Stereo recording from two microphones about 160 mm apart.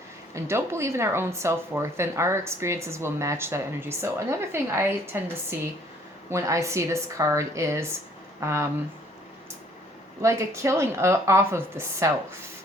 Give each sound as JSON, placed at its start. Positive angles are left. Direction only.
{"t": 0.3, "sound": "a woman's voice", "side_deg": -15}
{"t": 10.2, "sound": "speech", "side_deg": -20}